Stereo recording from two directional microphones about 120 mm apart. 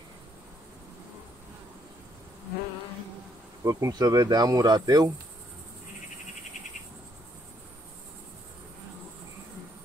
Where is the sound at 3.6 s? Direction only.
30° right (ahead or behind).